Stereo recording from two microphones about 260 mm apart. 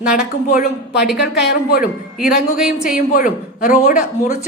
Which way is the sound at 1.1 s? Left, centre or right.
Left.